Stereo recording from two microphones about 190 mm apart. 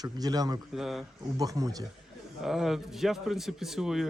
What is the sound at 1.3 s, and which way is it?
Speech, 20° right (ahead or behind).